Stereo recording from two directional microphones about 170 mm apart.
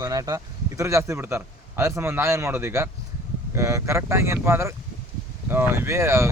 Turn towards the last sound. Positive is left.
turn(degrees=-15)  # may be behind; listen again after turning